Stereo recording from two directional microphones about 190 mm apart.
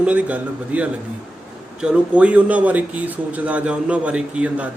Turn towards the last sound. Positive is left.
turn(degrees=-5)  # may be behind; listen again after turning